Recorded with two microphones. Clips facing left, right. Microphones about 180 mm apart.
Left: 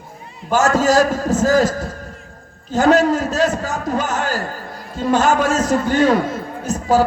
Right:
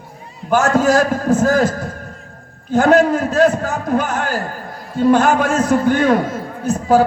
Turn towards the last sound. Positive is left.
turn(degrees=-55)  # may be behind; listen again after turning